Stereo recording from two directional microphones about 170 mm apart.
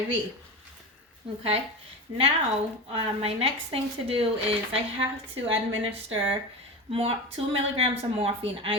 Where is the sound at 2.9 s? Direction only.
35° right (ahead or behind).